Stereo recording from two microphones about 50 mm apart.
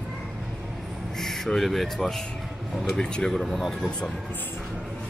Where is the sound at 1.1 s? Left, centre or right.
Centre.